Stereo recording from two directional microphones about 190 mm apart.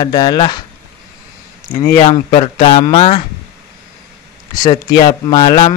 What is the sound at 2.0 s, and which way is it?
Speech, 30° left (ahead or behind).